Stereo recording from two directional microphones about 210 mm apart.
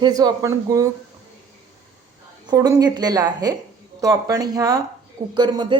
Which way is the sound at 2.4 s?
15° right (ahead or behind).